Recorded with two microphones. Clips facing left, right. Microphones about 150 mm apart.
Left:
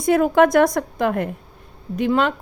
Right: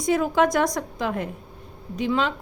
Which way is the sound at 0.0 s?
55° left (ahead or behind).